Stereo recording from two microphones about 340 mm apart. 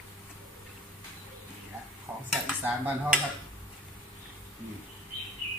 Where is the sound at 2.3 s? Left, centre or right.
Centre.